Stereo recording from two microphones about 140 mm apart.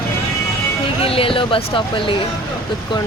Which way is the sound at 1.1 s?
40° left (ahead or behind).